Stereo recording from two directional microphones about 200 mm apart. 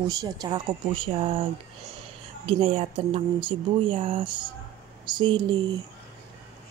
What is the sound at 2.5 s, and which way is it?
Speech, 30° right (ahead or behind).